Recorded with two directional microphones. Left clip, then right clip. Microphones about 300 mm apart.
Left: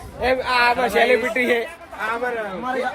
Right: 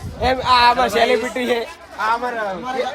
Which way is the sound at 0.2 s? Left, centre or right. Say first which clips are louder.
Right 4 dB; centre.